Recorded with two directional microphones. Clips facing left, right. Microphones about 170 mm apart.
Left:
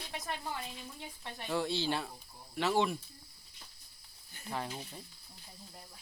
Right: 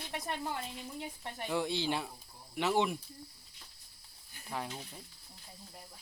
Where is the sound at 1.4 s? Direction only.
15° right (ahead or behind).